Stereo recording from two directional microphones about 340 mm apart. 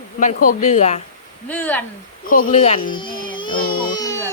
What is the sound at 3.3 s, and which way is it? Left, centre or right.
Baby cry, centre.